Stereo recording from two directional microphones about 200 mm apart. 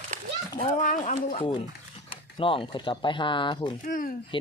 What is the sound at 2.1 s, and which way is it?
Speech, 25° left (ahead or behind).